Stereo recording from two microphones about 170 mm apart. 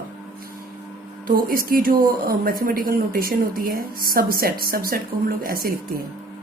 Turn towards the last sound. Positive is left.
turn(degrees=-55)  # may be behind; listen again after turning